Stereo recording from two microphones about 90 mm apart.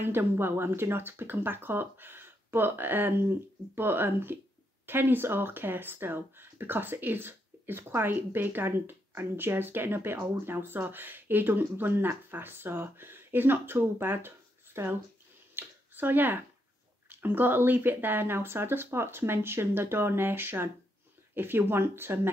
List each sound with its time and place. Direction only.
0.0 s speech: 25° right (ahead or behind)
15.5 s a sound: 20° right (ahead or behind)
17.1 s speech: 20° right (ahead or behind)